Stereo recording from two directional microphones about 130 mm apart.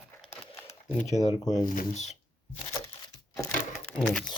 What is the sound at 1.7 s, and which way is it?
Speech, 75° left (ahead or behind).